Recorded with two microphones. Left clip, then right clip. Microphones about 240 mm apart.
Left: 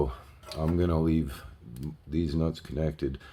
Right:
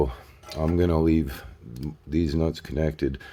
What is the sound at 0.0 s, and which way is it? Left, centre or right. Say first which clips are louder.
Dishes: right 5 dB; right.